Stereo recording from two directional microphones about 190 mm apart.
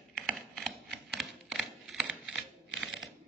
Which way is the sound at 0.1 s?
Centre (ahead or behind).